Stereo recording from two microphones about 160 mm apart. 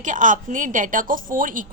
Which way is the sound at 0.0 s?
55° right (ahead or behind).